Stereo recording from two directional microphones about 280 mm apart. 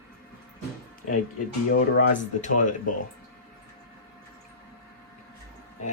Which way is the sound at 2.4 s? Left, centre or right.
Left.